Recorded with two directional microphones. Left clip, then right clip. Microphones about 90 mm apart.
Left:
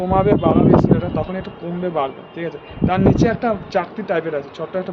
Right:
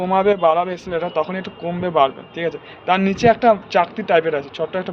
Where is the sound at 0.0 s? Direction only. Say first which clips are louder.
Right 1 dB; 20° left (ahead or behind).